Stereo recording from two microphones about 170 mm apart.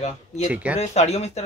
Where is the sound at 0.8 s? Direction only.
40° left (ahead or behind).